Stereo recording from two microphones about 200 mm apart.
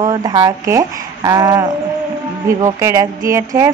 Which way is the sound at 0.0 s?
20° right (ahead or behind).